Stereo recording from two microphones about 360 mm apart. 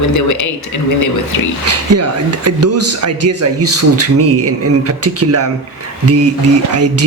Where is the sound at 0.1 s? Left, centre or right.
Left.